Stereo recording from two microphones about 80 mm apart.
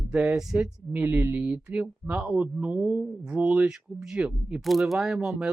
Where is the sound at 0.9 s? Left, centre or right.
Right.